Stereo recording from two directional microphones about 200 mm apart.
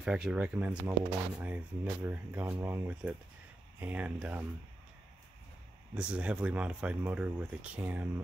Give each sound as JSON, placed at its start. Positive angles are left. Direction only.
{"t": 0.0, "sound": "speech", "side_deg": -5}
{"t": 5.9, "sound": "speech", "side_deg": -5}